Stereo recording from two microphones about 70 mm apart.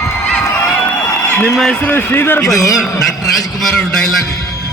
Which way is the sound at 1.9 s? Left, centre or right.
Left.